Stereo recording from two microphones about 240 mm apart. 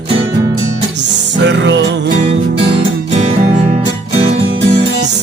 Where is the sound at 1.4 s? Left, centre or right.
Right.